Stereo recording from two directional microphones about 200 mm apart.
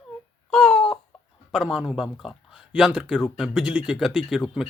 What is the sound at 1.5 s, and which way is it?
Speech, centre (ahead or behind).